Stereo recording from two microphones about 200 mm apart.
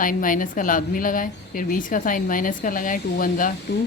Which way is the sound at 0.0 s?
45° left (ahead or behind).